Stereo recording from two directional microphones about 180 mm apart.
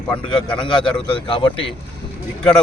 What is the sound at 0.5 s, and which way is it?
A man's voice, 25° left (ahead or behind).